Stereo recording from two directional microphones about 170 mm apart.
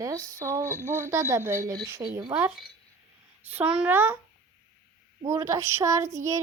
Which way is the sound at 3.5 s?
10° right (ahead or behind).